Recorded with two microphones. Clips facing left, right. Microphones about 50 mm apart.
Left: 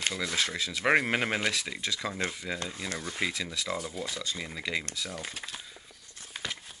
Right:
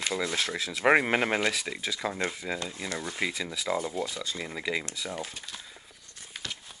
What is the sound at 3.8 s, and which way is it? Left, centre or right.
Speech, right.